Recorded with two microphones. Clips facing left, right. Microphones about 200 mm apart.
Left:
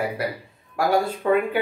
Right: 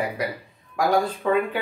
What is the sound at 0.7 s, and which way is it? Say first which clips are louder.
Speech: even; 5° left (ahead or behind).